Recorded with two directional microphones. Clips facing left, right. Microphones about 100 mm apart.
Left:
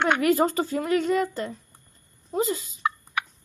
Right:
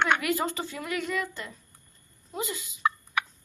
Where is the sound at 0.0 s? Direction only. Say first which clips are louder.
Left 5 dB; 40° left (ahead or behind).